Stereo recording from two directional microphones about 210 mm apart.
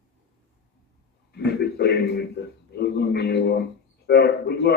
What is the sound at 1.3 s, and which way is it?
A man's voice, 50° left (ahead or behind).